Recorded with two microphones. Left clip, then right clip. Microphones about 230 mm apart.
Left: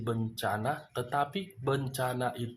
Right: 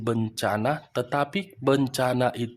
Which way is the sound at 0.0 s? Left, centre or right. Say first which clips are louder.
Right 7 dB; right.